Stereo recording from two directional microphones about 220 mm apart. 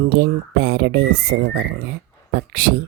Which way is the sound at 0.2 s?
50° right (ahead or behind).